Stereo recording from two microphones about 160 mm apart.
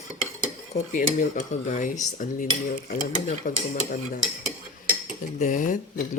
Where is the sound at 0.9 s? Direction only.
50° left (ahead or behind).